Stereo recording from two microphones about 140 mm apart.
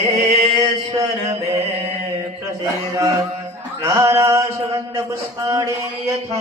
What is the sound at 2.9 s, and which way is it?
Mantra, 25° right (ahead or behind).